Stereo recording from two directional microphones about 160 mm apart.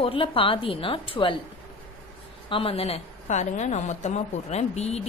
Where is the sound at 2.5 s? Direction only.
35° left (ahead or behind).